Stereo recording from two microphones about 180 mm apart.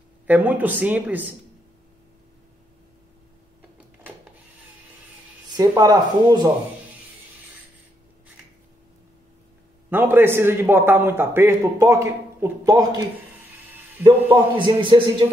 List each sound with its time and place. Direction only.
0.3 s a man's voice: 10° right (ahead or behind)
5.6 s speech: 20° right (ahead or behind)
9.8 s a man's voice: 10° right (ahead or behind)
14.3 s speech: 30° right (ahead or behind)